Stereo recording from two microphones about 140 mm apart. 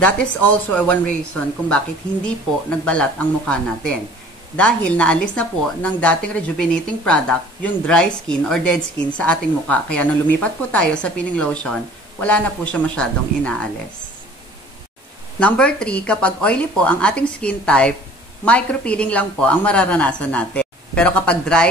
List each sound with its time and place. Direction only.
0.0 s speech: 10° left (ahead or behind)
2.8 s speech: 10° left (ahead or behind)
15.3 s speech: 10° left (ahead or behind)